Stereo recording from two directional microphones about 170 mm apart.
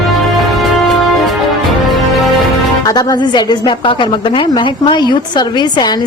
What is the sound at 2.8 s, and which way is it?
A woman's voice, 20° left (ahead or behind).